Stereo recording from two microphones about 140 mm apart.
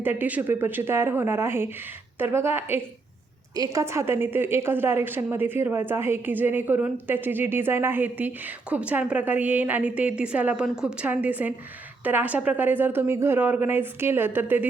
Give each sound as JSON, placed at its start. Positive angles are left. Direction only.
{"t": 0.0, "sound": "a woman's voice", "side_deg": -15}